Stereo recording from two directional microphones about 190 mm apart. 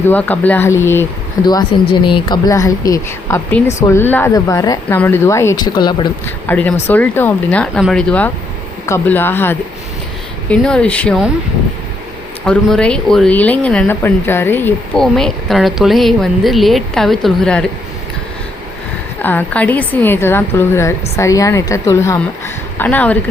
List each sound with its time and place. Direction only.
0.1 s a woman's voice: 10° left (ahead or behind)
6.2 s a woman's voice: 10° left (ahead or behind)
12.5 s speech: 5° left (ahead or behind)
19.2 s a woman's voice: 10° left (ahead or behind)